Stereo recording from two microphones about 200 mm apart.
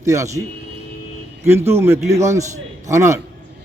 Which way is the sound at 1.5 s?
10° right (ahead or behind).